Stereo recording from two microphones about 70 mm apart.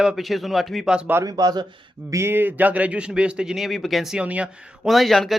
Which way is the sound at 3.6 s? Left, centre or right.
Centre.